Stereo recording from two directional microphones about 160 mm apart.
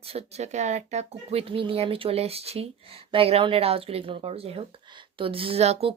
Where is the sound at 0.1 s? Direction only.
40° right (ahead or behind).